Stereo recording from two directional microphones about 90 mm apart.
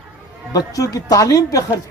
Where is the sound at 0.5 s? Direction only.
40° left (ahead or behind).